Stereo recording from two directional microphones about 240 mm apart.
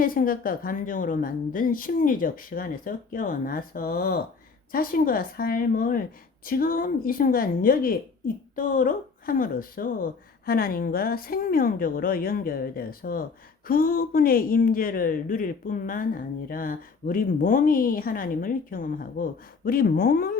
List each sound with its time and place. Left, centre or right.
0.0 s speech: left